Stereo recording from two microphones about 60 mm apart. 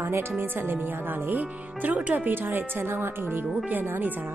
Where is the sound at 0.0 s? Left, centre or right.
Right.